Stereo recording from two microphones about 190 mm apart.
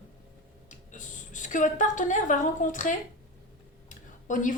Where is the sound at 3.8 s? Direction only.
40° left (ahead or behind).